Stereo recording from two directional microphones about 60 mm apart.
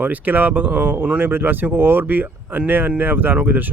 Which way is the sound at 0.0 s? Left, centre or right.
Right.